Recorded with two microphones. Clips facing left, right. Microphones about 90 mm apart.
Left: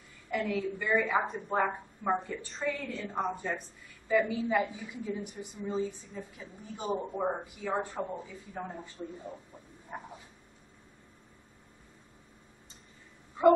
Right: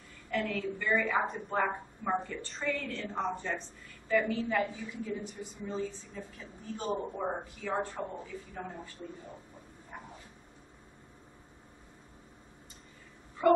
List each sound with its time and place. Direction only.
0.3 s speech: 10° left (ahead or behind)
1.2 s speech: centre (ahead or behind); by 8.9 s 15° left (ahead or behind)
9.9 s a sound: 30° left (ahead or behind)
13.4 s speech: 20° left (ahead or behind)